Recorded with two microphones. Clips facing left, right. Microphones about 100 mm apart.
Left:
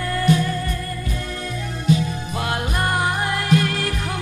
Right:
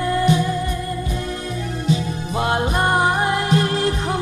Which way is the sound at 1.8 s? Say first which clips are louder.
Left 3 dB; 25° right (ahead or behind).